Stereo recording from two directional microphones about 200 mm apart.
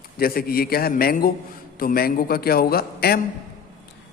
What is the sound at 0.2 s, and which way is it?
A man's voice, 50° left (ahead or behind).